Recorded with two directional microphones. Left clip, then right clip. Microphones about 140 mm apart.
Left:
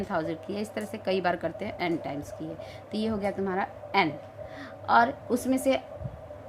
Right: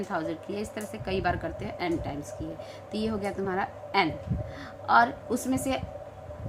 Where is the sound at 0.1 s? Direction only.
40° left (ahead or behind).